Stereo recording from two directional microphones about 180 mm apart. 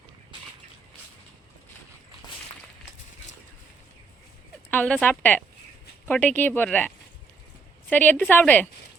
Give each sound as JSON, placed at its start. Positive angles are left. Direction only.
{"t": 4.7, "sound": "speech", "side_deg": 10}